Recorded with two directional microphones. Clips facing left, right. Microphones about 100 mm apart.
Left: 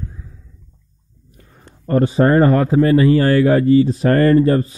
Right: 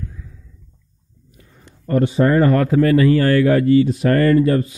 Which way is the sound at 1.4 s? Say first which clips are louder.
Left 2 dB; 40° left (ahead or behind).